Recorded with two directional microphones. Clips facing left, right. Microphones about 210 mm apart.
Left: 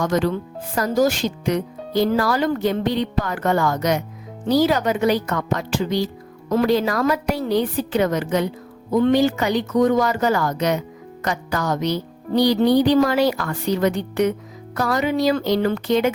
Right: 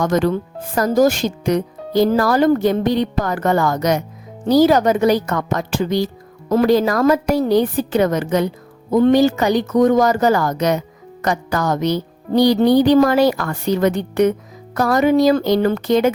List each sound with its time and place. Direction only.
0.0 s speech: 45° right (ahead or behind)